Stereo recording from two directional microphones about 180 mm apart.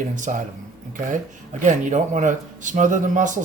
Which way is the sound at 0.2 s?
45° right (ahead or behind).